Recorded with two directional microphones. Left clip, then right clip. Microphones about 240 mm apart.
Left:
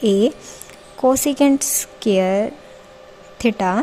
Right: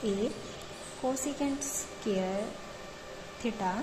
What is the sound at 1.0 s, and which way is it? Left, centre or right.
A woman's voice, left.